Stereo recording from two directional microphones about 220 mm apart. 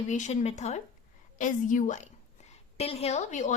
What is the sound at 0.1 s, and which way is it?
A woman's voice, 30° left (ahead or behind).